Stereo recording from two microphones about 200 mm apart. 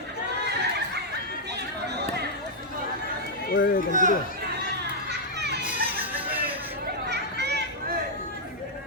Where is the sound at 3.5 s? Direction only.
45° left (ahead or behind).